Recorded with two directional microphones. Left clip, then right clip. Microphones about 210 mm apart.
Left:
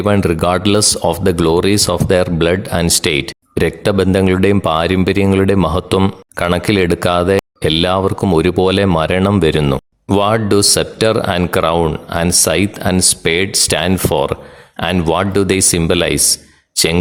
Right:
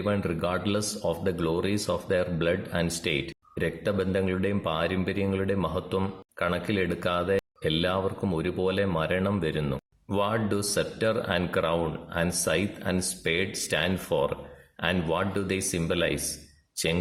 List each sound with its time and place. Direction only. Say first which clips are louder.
0.0 s speech: left 14 dB; 45° left (ahead or behind)